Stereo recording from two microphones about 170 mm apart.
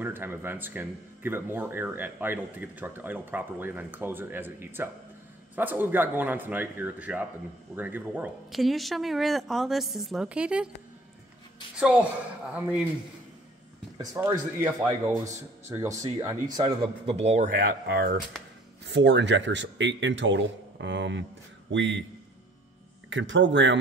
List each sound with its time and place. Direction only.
0.0 s speech: 10° right (ahead or behind)
11.7 s speech: 5° right (ahead or behind)
13.9 s speech: 20° right (ahead or behind)
17.1 s speech: 40° right (ahead or behind)
17.6 s speech: 65° right (ahead or behind)
18.9 s a man's voice: 90° right
23.0 s a man's voice: 90° right